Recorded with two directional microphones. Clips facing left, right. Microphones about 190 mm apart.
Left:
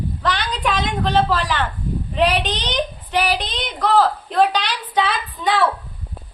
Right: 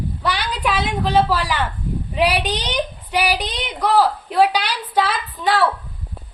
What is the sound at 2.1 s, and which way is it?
A woman's voice, 10° right (ahead or behind).